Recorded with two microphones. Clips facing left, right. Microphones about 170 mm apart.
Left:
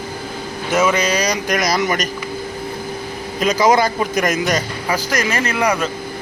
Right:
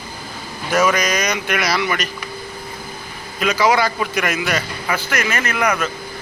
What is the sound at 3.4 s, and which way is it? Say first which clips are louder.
Speech: left 2 dB; 40° left (ahead or behind).